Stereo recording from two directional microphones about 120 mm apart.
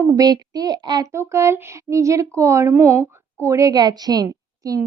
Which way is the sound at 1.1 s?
25° right (ahead or behind).